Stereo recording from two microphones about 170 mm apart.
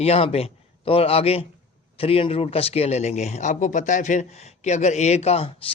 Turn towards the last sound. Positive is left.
turn(degrees=35)  # may be behind; listen again after turning